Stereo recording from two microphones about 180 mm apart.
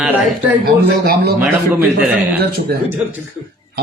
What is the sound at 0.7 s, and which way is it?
Speech, 60° right (ahead or behind).